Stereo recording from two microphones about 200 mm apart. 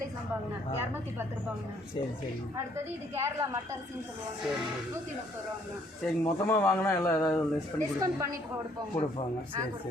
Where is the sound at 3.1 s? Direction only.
15° right (ahead or behind).